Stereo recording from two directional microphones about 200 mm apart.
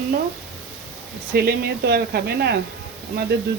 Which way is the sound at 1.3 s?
55° right (ahead or behind).